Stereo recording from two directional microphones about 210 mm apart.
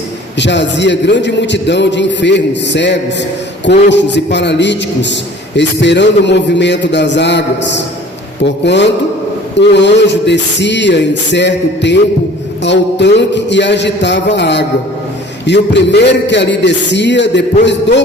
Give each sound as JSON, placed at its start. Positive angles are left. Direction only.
{"t": 0.3, "sound": "a man's voice", "side_deg": 55}